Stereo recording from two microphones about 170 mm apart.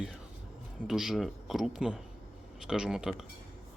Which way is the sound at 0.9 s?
Centre (ahead or behind).